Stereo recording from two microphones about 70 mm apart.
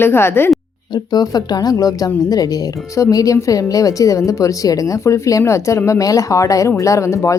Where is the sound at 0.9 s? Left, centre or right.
Left.